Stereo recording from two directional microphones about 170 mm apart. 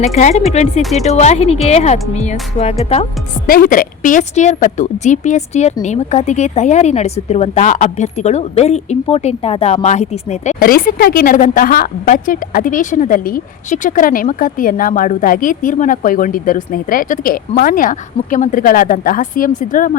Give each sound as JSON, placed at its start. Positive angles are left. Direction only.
{"t": 0.0, "sound": "a woman's voice", "side_deg": 40}
{"t": 3.4, "sound": "a woman's voice", "side_deg": 55}
{"t": 10.6, "sound": "a woman's voice", "side_deg": 55}